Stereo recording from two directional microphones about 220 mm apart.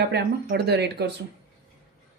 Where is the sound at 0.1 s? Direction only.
50° right (ahead or behind).